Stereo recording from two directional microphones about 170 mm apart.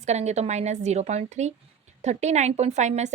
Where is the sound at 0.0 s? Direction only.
40° right (ahead or behind).